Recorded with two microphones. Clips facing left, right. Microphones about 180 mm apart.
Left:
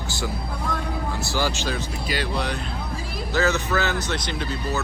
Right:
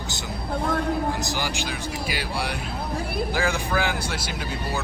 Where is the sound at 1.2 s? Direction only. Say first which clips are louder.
Left 2 dB; 15° right (ahead or behind).